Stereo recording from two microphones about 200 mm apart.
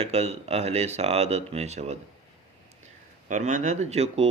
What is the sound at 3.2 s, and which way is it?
A man's voice, 35° right (ahead or behind).